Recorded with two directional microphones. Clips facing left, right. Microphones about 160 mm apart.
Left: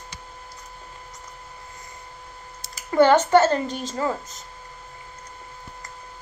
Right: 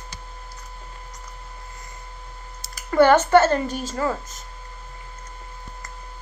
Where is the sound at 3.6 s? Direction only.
5° right (ahead or behind).